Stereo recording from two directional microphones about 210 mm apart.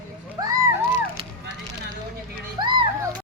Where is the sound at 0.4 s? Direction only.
20° right (ahead or behind).